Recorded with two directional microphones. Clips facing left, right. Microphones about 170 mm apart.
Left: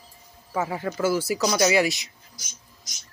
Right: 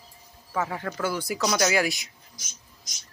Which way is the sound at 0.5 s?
10° left (ahead or behind).